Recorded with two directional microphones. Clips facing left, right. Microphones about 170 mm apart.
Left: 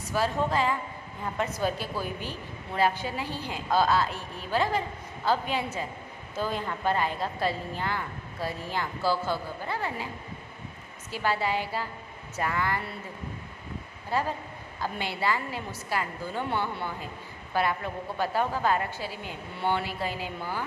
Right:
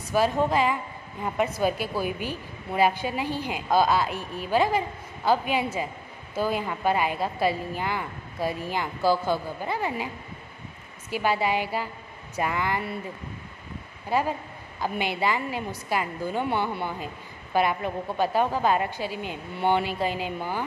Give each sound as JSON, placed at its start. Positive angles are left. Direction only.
{"t": 0.1, "sound": "a woman's voice", "side_deg": -15}
{"t": 11.1, "sound": "a woman's voice", "side_deg": -15}
{"t": 14.1, "sound": "a woman's voice", "side_deg": -15}